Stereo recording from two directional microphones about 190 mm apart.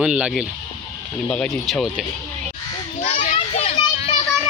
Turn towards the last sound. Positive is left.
turn(degrees=30)  # may be behind; listen again after turning